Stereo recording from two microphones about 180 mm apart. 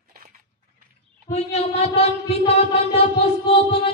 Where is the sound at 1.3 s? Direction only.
35° left (ahead or behind).